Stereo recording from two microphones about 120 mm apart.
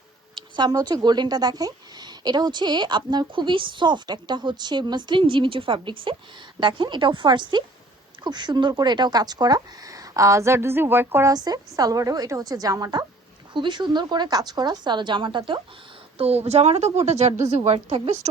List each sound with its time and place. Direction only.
0.3 s speech: 35° right (ahead or behind); by 11.3 s 20° right (ahead or behind)
11.3 s speech: 35° right (ahead or behind)
16.1 s a woman's voice: 60° right (ahead or behind)